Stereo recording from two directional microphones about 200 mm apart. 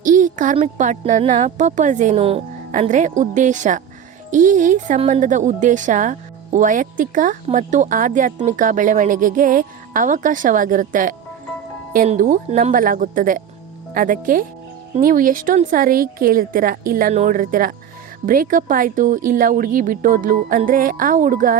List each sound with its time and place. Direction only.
0.0 s speech: 40° right (ahead or behind)